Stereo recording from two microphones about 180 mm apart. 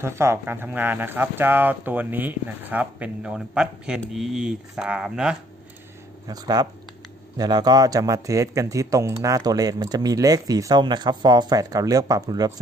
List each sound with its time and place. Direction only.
0.0 s speech: 15° right (ahead or behind)
6.2 s speech: 20° right (ahead or behind)